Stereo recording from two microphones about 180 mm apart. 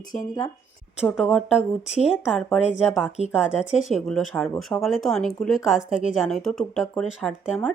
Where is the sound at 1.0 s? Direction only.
Centre (ahead or behind).